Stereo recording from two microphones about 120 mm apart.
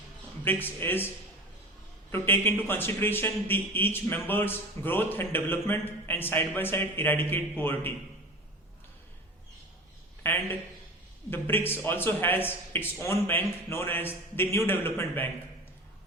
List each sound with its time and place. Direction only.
0.4 s speech: 15° left (ahead or behind)
2.1 s speech: 20° left (ahead or behind)
10.3 s speech: 15° left (ahead or behind)